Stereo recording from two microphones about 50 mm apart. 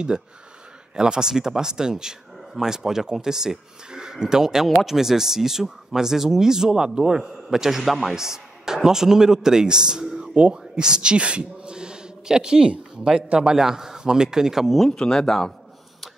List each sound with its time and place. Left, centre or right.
0.9 s a man's voice: centre
14.9 s speech: centre